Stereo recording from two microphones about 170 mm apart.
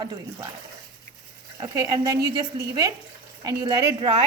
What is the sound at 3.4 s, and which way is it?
Speech, 20° right (ahead or behind).